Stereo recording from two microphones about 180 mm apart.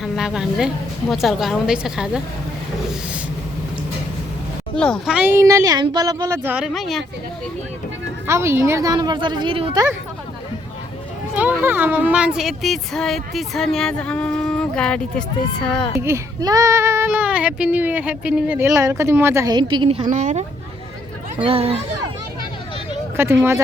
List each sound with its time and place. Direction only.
0.0 s a woman's voice: centre (ahead or behind)
4.8 s speech: 5° left (ahead or behind)
5.1 s speech: 10° right (ahead or behind)
8.3 s a woman's voice: 15° right (ahead or behind); by 9.7 s 30° right (ahead or behind)
11.3 s speech: 10° right (ahead or behind)
16.0 s speech: 15° right (ahead or behind)
20.1 s speech: 40° right (ahead or behind)
21.3 s speech: 30° right (ahead or behind)
23.1 s speech: 15° right (ahead or behind)